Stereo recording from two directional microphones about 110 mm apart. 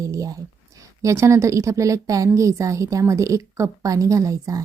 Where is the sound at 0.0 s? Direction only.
30° right (ahead or behind).